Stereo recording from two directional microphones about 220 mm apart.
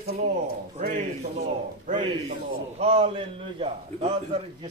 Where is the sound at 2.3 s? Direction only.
30° right (ahead or behind).